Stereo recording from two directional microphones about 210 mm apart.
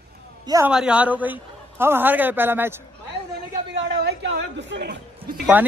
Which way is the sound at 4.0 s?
55° right (ahead or behind).